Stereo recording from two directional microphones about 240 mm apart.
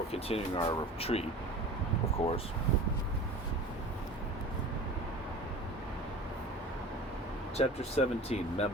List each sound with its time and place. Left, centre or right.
0.1 s speech: left
7.5 s speech: left